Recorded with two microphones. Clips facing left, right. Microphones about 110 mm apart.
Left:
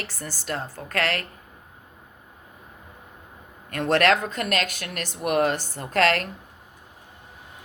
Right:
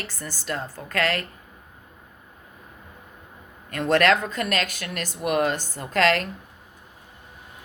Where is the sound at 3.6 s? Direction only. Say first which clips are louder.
Right 1 dB; 45° left (ahead or behind).